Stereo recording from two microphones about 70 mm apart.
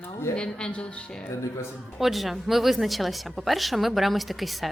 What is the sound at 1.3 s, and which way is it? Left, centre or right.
Speech, left.